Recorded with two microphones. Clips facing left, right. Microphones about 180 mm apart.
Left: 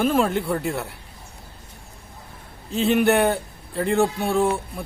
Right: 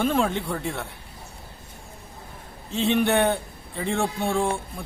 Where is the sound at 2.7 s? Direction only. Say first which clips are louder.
Left 3 dB; centre (ahead or behind).